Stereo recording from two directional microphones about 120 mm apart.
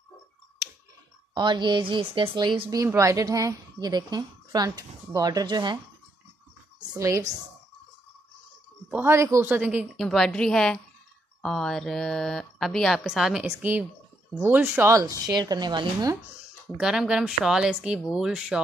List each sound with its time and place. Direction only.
1.3 s speech: 40° right (ahead or behind)
2.9 s a woman's voice: 25° right (ahead or behind)
6.8 s speech: 30° right (ahead or behind)
8.9 s speech: 20° right (ahead or behind)
9.6 s speech: 10° right (ahead or behind)
9.9 s a woman's voice: 5° left (ahead or behind); by 16.2 s 35° right (ahead or behind)
16.7 s speech: 5° right (ahead or behind)